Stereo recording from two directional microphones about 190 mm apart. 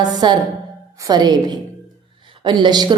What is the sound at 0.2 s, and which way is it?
A woman's voice, 25° right (ahead or behind).